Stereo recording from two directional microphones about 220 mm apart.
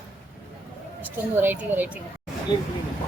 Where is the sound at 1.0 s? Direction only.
10° right (ahead or behind).